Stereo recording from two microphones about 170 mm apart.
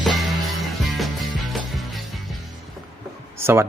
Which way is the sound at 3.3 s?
15° right (ahead or behind).